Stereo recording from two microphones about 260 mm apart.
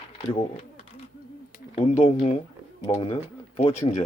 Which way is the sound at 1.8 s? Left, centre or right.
Left.